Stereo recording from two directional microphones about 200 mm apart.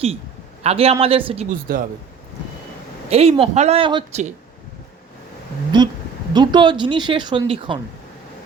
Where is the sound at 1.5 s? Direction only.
45° right (ahead or behind).